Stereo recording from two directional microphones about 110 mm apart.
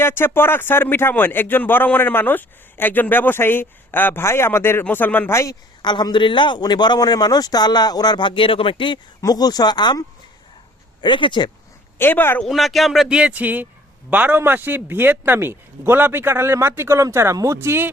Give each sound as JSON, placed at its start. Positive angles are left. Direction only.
{"t": 0.0, "sound": "speech", "side_deg": 20}
{"t": 5.8, "sound": "a man's voice", "side_deg": 40}
{"t": 9.2, "sound": "a man's voice", "side_deg": 35}
{"t": 11.0, "sound": "speech", "side_deg": 45}
{"t": 11.9, "sound": "speech", "side_deg": 20}
{"t": 12.4, "sound": "a man's voice", "side_deg": 0}